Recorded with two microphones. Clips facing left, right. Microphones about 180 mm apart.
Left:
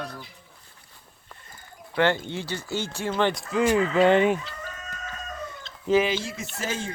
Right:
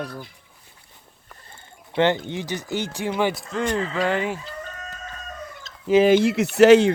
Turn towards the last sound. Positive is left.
turn(degrees=-70)  # may be behind; listen again after turning